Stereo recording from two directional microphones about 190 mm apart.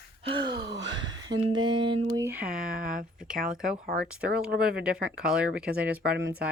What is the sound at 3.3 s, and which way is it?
Speech, 5° right (ahead or behind).